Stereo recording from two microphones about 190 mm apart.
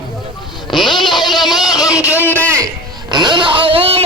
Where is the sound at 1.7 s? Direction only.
20° left (ahead or behind).